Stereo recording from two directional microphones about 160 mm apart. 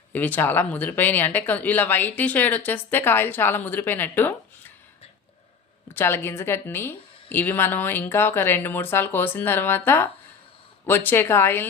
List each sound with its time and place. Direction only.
0.1 s speech: 10° left (ahead or behind)
5.9 s speech: 15° left (ahead or behind)